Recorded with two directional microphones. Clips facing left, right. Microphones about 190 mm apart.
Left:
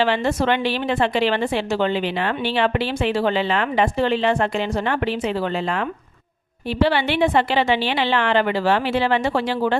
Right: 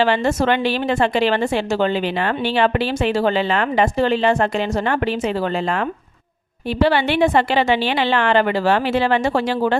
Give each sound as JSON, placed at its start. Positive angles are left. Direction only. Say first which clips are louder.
{"t": 0.0, "sound": "a woman's voice", "louder": "right 2 dB", "side_deg": -45}
{"t": 6.7, "sound": "a woman's voice", "louder": "right 2 dB", "side_deg": -45}